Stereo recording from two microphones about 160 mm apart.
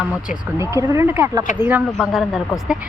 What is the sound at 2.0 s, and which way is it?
Speech, centre (ahead or behind).